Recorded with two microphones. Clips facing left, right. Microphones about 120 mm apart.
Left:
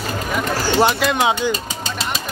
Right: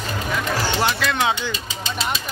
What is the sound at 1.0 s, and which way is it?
Speech, 15° left (ahead or behind).